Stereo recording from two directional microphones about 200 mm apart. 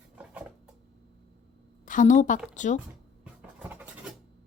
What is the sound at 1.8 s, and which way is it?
Speech, 40° left (ahead or behind).